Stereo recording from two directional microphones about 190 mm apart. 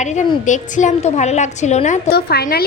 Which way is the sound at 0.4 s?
40° left (ahead or behind).